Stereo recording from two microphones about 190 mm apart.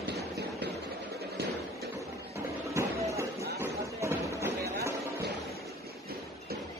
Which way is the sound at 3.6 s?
15° right (ahead or behind).